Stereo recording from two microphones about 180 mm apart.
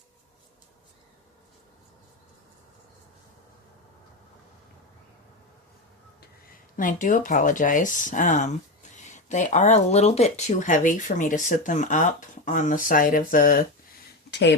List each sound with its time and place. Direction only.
6.7 s speech: 45° left (ahead or behind)
14.3 s speech: 75° left (ahead or behind)